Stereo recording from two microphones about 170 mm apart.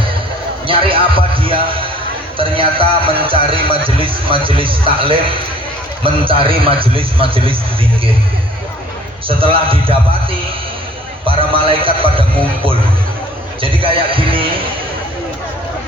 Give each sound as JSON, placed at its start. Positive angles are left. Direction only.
{"t": 0.7, "sound": "music", "side_deg": -30}
{"t": 2.4, "sound": "speech", "side_deg": -30}
{"t": 9.2, "sound": "speech", "side_deg": -35}
{"t": 11.3, "sound": "speech", "side_deg": -30}
{"t": 13.6, "sound": "speech", "side_deg": -30}